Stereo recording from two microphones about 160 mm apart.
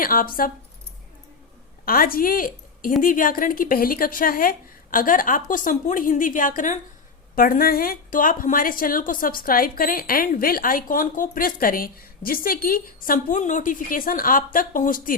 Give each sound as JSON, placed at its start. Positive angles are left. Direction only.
{"t": 0.0, "sound": "a woman's voice", "side_deg": 65}
{"t": 1.8, "sound": "a woman's voice", "side_deg": 65}